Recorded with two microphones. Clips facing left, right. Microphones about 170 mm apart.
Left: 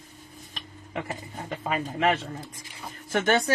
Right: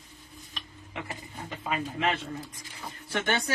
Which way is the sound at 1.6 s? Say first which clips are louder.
Left 3 dB; 45° left (ahead or behind).